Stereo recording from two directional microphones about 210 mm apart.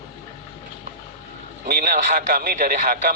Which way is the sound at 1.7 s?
40° right (ahead or behind).